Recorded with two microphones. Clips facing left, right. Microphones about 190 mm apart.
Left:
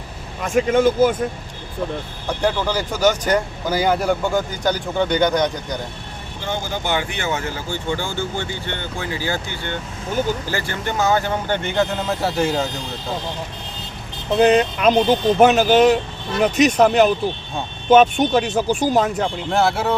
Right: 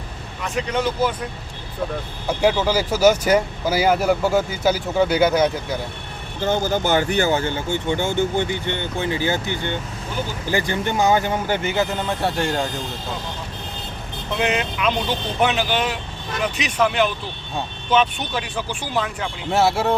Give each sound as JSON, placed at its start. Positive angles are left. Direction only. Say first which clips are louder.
{"t": 0.3, "sound": "speech", "louder": "left 7 dB", "side_deg": 50}
{"t": 2.2, "sound": "speech", "louder": "right 2 dB", "side_deg": -10}
{"t": 6.4, "sound": "speech", "louder": "right 5 dB", "side_deg": -45}
{"t": 14.3, "sound": "speech", "louder": "left 8 dB", "side_deg": 35}
{"t": 19.5, "sound": "speech", "louder": "right 2 dB", "side_deg": 0}